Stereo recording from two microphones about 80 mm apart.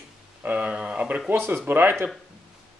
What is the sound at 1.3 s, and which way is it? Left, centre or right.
Speech, right.